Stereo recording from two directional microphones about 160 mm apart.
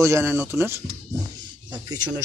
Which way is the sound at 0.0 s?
15° right (ahead or behind).